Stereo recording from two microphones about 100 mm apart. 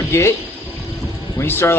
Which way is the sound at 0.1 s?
25° left (ahead or behind).